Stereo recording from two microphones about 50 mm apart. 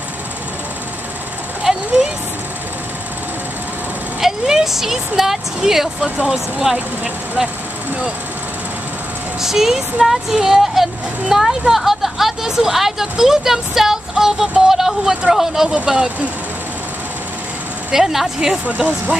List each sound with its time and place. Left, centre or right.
1.6 s a sound: centre
4.2 s speech: centre
6.0 s speech: centre
6.3 s speech: centre
9.4 s speech: centre
15.7 s speech: centre
17.9 s speech: centre